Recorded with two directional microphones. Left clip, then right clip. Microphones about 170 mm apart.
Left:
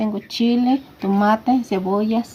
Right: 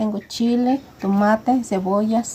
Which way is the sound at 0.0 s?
10° right (ahead or behind).